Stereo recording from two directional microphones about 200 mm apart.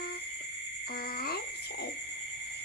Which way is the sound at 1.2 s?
50° left (ahead or behind).